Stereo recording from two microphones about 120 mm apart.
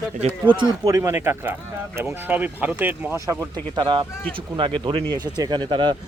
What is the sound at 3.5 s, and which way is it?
Speech, 40° right (ahead or behind).